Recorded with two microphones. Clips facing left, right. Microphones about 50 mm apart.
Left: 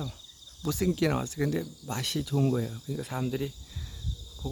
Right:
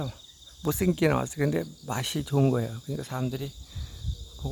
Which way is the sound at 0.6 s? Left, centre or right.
Right.